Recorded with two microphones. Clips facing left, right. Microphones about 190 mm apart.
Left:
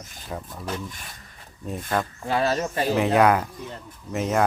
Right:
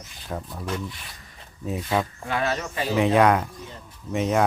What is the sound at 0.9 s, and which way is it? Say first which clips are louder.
Speech: right 1 dB; 45° left (ahead or behind).